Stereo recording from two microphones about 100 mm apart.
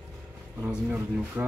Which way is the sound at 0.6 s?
15° right (ahead or behind).